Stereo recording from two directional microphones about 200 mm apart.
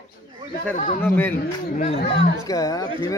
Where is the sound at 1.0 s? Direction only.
10° left (ahead or behind).